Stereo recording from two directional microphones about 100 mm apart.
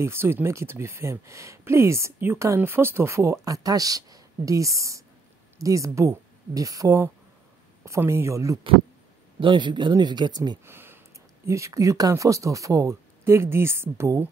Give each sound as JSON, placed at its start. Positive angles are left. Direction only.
{"t": 0.0, "sound": "speech", "side_deg": -25}
{"t": 9.4, "sound": "speech", "side_deg": -50}
{"t": 10.6, "sound": "a sound", "side_deg": -25}
{"t": 11.4, "sound": "speech", "side_deg": -30}